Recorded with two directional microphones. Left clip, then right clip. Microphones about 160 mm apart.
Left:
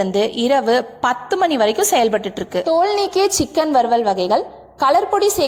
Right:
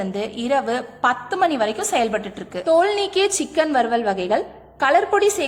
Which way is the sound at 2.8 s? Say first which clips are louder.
Left 3 dB; 20° left (ahead or behind).